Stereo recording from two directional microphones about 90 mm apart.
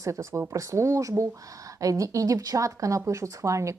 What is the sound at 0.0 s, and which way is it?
Speech, 35° right (ahead or behind).